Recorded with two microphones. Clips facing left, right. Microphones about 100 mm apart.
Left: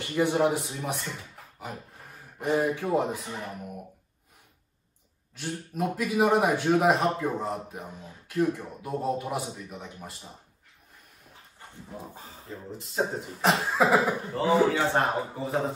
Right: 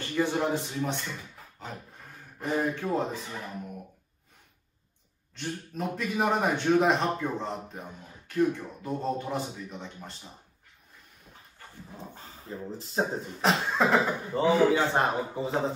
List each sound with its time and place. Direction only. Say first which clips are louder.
0.0 s speech: left 3 dB; 15° left (ahead or behind)
2.5 s a man's voice: left 3 dB; 5° left (ahead or behind)
5.3 s a man's voice: left 1 dB; 5° left (ahead or behind)
12.7 s speech: right 3 dB; 30° right (ahead or behind)
13.4 s a man's voice: left 2 dB; centre (ahead or behind)
14.3 s a man's voice: right 1 dB; 15° right (ahead or behind)